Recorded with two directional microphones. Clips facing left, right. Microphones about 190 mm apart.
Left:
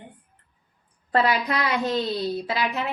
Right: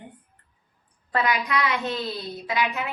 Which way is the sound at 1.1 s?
30° left (ahead or behind).